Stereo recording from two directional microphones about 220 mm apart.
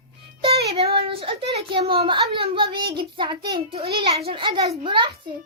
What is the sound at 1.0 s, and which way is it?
A child's voice, 25° right (ahead or behind).